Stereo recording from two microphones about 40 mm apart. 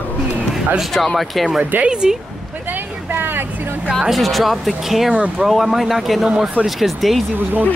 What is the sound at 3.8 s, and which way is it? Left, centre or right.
Speech, centre.